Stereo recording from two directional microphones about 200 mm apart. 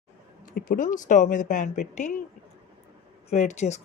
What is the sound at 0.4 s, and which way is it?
Speech, 45° left (ahead or behind).